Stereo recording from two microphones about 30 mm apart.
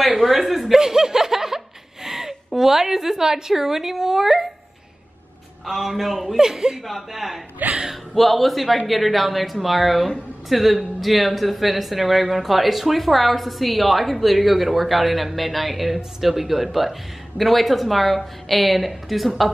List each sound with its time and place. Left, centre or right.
0.0 s a sound: centre
0.7 s snicker: centre
2.0 s a woman's voice: centre
5.7 s a man's voice: centre
7.0 s a woman's voice: centre
8.1 s a woman's voice: centre